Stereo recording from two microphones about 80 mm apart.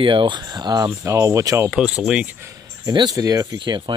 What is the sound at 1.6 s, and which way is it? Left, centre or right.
Speech, centre.